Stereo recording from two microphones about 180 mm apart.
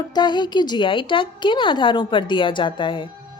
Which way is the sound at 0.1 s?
25° left (ahead or behind).